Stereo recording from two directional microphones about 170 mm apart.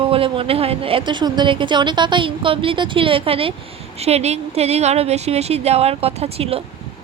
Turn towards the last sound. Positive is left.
turn(degrees=-35)  # may be behind; listen again after turning